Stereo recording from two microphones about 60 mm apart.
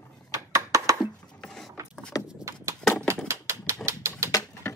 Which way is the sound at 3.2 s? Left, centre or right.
Right.